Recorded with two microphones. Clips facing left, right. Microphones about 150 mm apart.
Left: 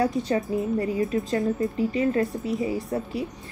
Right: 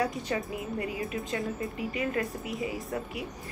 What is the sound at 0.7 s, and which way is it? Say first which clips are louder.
A woman's voice: left 8 dB; 35° left (ahead or behind).